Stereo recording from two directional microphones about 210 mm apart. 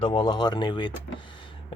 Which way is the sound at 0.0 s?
25° left (ahead or behind).